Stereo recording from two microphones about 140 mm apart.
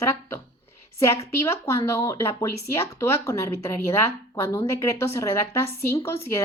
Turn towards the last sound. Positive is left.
turn(degrees=15)  # may be behind; listen again after turning